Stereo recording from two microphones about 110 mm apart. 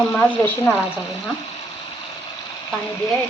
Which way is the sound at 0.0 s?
5° left (ahead or behind).